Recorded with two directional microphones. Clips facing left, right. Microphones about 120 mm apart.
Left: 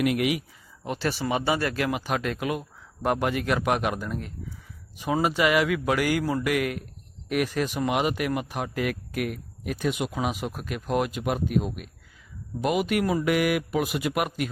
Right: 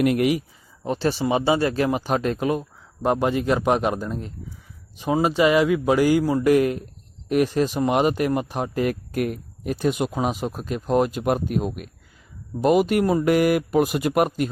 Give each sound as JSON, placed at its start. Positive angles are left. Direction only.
{"t": 0.0, "sound": "speech", "side_deg": -40}